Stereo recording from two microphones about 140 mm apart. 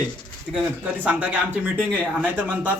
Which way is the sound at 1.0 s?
10° right (ahead or behind).